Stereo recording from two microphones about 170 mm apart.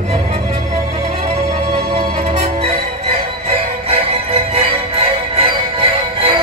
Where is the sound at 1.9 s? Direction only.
35° right (ahead or behind).